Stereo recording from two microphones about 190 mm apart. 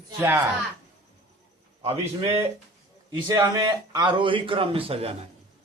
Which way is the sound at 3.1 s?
20° right (ahead or behind).